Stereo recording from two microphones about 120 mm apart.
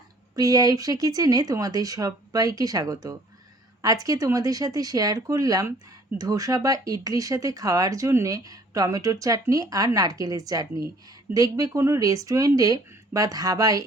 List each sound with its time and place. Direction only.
0.3 s speech: 30° right (ahead or behind)